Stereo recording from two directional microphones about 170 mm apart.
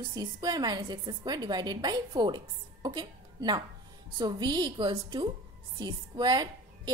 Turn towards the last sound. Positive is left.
turn(degrees=-25)  # may be behind; listen again after turning